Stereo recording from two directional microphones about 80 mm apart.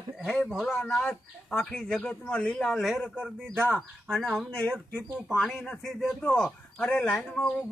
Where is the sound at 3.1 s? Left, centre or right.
Centre.